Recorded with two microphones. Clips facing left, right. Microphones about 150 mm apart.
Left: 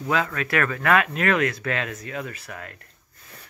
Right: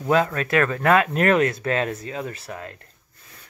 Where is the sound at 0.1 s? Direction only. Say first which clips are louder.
Right 5 dB; 30° right (ahead or behind).